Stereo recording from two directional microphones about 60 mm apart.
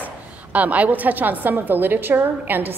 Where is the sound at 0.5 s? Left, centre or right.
Right.